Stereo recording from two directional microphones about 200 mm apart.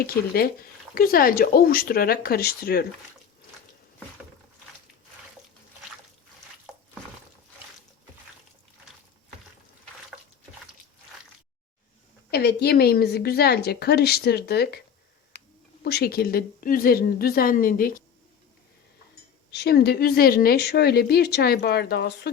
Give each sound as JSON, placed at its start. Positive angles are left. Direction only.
{"t": 0.0, "sound": "a woman's voice", "side_deg": 50}
{"t": 12.3, "sound": "a woman's voice", "side_deg": 55}
{"t": 19.5, "sound": "a woman's voice", "side_deg": 55}